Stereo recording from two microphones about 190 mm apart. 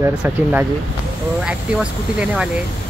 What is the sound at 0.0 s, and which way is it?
Speech, 10° right (ahead or behind).